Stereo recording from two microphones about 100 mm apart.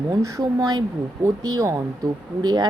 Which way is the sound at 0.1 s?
30° right (ahead or behind).